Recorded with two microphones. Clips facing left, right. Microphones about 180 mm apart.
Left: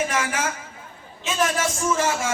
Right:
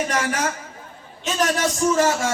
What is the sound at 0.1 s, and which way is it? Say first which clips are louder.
A man's voice: right 2 dB; 35° right (ahead or behind).